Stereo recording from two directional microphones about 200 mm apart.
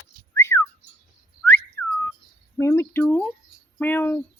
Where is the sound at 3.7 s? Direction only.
10° left (ahead or behind).